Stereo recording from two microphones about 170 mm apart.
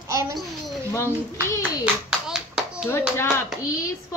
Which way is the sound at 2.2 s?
5° right (ahead or behind).